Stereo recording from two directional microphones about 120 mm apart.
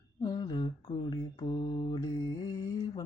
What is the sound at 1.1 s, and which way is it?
Mantra, 45° left (ahead or behind).